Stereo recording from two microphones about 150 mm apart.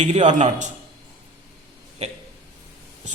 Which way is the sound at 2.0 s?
50° right (ahead or behind).